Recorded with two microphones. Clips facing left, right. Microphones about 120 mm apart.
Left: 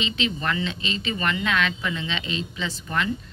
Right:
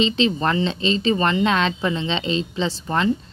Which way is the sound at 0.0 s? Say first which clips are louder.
Right 8 dB; 30° right (ahead or behind).